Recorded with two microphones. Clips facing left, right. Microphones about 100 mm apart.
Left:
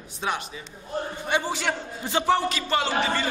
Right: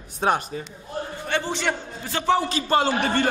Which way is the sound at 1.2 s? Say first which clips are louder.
Right 1 dB; 10° left (ahead or behind).